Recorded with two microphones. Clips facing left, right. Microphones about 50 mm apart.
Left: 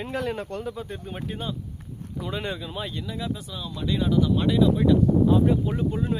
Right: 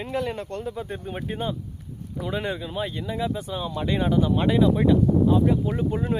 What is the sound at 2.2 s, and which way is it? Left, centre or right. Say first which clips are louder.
Speech: right 3 dB; centre.